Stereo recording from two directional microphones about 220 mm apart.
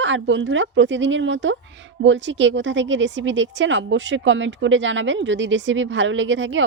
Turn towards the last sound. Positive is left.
turn(degrees=-55)  # may be behind; listen again after turning